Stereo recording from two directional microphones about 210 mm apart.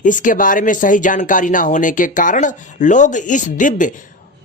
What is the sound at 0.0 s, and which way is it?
Speech, 40° left (ahead or behind).